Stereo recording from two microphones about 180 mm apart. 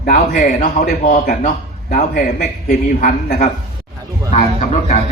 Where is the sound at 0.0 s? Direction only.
45° left (ahead or behind).